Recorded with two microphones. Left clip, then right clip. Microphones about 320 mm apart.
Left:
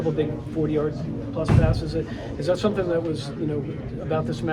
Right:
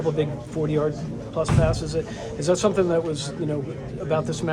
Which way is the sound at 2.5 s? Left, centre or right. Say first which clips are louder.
Right 3 dB; right.